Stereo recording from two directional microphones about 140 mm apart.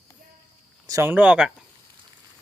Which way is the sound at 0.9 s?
20° right (ahead or behind).